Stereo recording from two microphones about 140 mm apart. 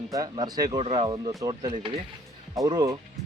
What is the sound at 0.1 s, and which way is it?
Speech, 25° right (ahead or behind).